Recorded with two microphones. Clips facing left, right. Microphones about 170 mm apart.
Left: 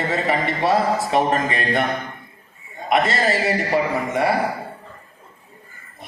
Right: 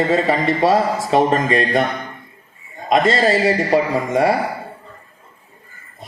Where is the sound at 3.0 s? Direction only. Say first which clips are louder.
Right 5 dB; 30° right (ahead or behind).